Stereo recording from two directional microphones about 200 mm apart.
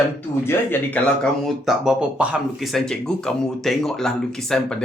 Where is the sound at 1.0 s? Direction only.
10° left (ahead or behind).